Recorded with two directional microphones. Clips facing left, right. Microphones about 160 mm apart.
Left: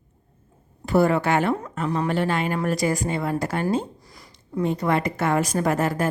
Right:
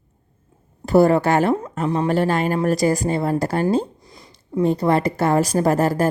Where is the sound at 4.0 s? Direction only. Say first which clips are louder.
Right 3 dB; 20° right (ahead or behind).